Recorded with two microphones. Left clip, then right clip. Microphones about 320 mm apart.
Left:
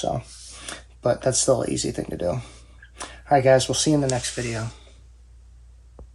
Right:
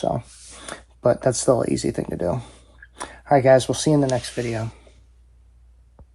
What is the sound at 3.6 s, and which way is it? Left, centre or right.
Speech, centre.